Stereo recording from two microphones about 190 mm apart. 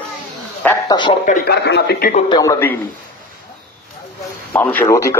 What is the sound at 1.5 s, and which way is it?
Speech, 60° left (ahead or behind).